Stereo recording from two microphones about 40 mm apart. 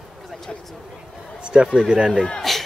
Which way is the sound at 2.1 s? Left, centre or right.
Centre.